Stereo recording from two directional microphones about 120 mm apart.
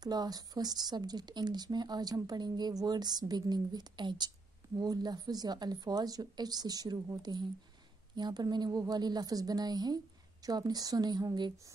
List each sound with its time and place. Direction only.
0.0 s speech: 35° right (ahead or behind)